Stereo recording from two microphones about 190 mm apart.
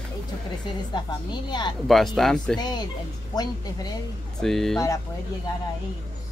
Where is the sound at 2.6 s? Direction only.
20° left (ahead or behind).